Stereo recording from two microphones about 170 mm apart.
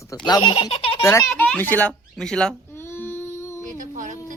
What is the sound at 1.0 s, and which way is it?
Speech, 20° left (ahead or behind).